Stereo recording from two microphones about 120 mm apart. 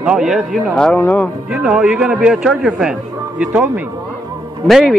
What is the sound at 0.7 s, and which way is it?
Speech, 10° left (ahead or behind).